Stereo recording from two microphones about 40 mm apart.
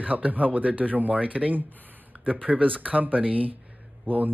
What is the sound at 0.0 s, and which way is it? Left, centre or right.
Speech, right.